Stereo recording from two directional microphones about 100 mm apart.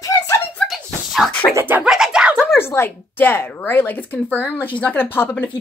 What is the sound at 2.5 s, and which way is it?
Speech, 25° left (ahead or behind).